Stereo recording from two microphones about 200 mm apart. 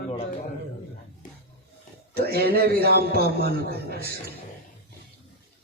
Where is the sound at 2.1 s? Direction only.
50° right (ahead or behind).